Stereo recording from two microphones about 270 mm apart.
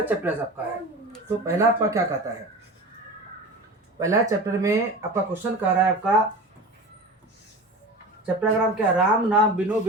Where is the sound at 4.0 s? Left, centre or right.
Centre.